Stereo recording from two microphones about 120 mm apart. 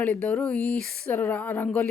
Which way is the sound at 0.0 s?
10° left (ahead or behind).